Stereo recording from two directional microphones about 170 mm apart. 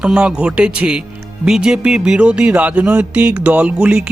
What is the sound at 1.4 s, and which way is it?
Music, 5° right (ahead or behind).